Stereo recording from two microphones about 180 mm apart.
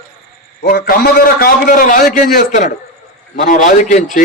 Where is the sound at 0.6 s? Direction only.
55° left (ahead or behind).